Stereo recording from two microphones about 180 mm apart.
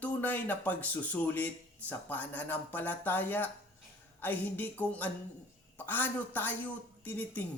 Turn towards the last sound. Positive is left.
turn(degrees=10)  # may be behind; listen again after turning